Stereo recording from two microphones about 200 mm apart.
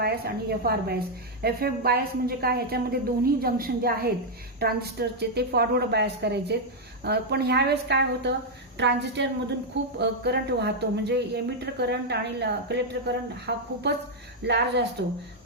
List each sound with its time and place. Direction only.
0.0 s a woman's voice: 50° right (ahead or behind)